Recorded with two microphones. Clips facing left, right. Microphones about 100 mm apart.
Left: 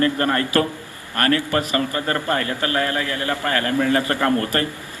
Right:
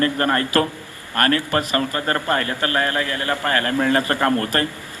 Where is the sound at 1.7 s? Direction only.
40° right (ahead or behind).